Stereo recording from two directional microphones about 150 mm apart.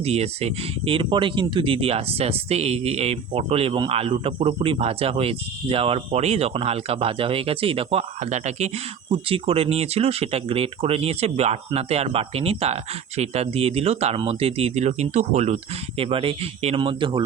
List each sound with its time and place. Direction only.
0.0 s speech: 45° right (ahead or behind)